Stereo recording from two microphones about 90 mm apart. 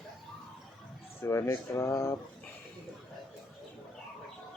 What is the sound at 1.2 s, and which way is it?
Speech, 30° left (ahead or behind).